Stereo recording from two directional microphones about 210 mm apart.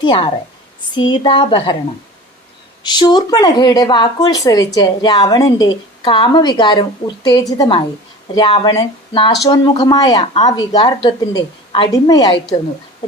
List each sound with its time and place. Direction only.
0.0 s speech: 25° left (ahead or behind)
2.8 s speech: 20° left (ahead or behind)